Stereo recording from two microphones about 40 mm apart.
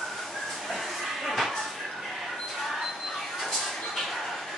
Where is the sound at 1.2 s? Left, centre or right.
Centre.